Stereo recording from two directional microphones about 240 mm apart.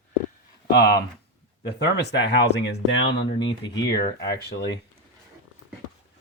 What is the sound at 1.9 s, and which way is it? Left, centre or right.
Speech, left.